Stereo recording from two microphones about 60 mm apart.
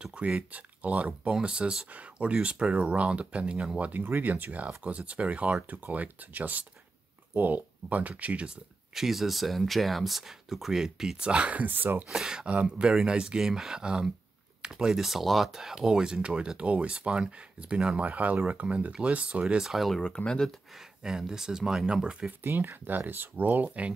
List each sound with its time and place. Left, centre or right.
0.0 s speech: centre
8.9 s speech: centre; by 12.0 s right
12.1 s speech: centre
12.4 s speech: centre
19.5 s speech: centre
20.0 s speech: centre
21.0 s speech: centre
22.4 s speech: right